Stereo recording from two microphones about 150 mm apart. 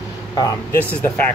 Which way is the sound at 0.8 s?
10° left (ahead or behind).